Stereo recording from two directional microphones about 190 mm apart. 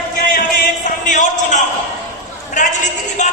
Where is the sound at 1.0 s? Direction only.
40° left (ahead or behind).